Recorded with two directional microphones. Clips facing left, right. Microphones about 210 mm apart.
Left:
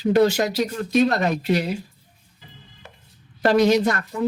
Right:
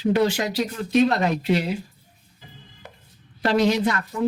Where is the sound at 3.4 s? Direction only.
45° left (ahead or behind).